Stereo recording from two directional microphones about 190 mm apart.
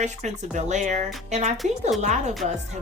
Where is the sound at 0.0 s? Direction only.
40° right (ahead or behind).